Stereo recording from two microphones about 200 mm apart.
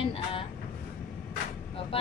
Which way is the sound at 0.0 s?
25° left (ahead or behind).